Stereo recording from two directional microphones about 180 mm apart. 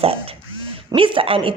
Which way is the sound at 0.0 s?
30° right (ahead or behind).